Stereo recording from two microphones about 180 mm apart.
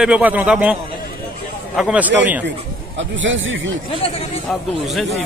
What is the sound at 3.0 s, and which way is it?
Speech, 90° right.